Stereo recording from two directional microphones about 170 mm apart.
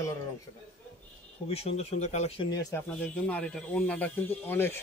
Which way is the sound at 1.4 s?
35° left (ahead or behind).